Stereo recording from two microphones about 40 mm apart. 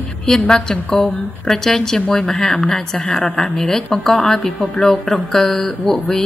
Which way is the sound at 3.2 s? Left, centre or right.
Left.